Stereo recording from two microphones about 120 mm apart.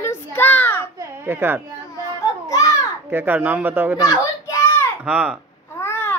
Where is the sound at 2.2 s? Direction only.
30° left (ahead or behind).